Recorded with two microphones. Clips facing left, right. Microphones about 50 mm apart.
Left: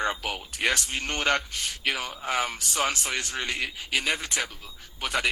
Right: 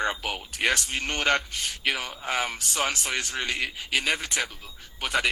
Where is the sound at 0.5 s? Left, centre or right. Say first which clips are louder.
Right 1 dB; right.